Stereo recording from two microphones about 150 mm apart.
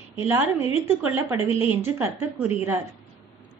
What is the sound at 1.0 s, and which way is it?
A woman's voice, 15° right (ahead or behind).